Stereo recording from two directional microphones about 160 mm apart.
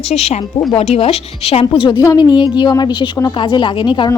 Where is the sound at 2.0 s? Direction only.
25° left (ahead or behind).